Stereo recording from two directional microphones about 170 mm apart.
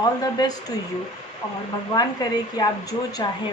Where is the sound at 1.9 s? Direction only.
20° left (ahead or behind).